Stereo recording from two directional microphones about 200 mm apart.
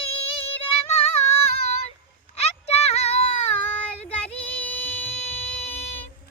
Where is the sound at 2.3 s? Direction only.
30° left (ahead or behind).